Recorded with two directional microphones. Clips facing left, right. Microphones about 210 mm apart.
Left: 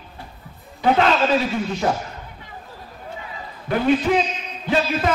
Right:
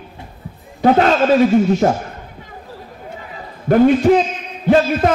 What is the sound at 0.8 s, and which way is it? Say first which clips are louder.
A man's voice: right 5 dB; 45° right (ahead or behind).